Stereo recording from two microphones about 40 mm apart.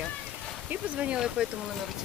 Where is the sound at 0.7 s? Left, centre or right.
Right.